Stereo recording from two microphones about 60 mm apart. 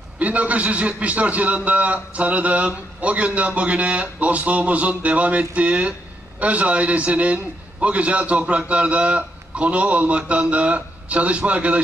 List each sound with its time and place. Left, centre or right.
0.2 s a man's voice: right